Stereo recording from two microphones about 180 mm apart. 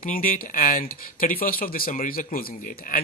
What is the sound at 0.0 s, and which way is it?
Speech, 50° left (ahead or behind).